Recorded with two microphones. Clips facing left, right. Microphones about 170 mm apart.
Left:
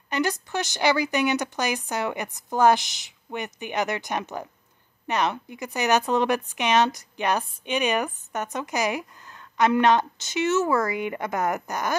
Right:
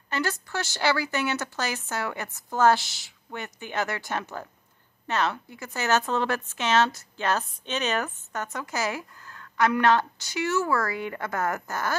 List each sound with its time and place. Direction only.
0.1 s a woman's voice: 15° left (ahead or behind)